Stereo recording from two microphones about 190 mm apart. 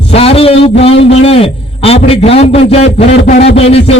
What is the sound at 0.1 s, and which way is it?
A man's voice, 30° left (ahead or behind).